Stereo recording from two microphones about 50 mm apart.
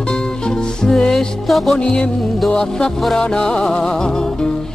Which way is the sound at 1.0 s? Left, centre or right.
Centre.